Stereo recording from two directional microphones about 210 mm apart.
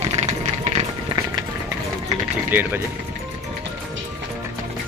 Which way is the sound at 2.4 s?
10° right (ahead or behind).